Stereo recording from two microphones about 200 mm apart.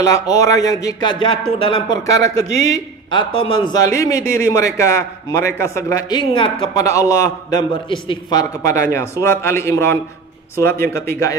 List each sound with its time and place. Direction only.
0.0 s a man's voice: 15° left (ahead or behind)